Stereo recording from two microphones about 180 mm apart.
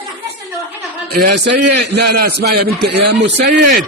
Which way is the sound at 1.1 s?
65° right (ahead or behind).